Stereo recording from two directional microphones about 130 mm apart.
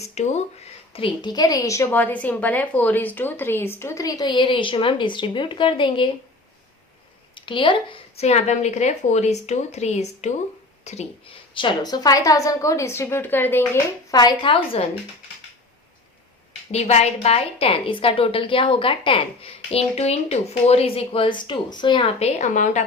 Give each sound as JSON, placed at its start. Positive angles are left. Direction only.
{"t": 0.0, "sound": "a woman's voice", "side_deg": 60}
{"t": 7.3, "sound": "a woman's voice", "side_deg": 40}
{"t": 11.5, "sound": "a woman's voice", "side_deg": 35}
{"t": 14.1, "sound": "a woman's voice", "side_deg": 30}
{"t": 16.7, "sound": "a woman's voice", "side_deg": 55}
{"t": 22.2, "sound": "a woman's voice", "side_deg": 65}